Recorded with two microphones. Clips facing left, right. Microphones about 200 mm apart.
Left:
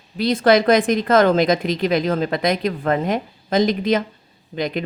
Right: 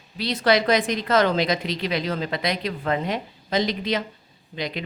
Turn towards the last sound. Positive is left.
turn(degrees=50)  # may be behind; listen again after turning